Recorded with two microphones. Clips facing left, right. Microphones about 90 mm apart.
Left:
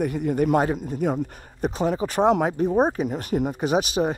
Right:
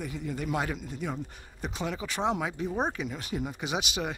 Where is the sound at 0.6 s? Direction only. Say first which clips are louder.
Left 10 dB; 40° left (ahead or behind).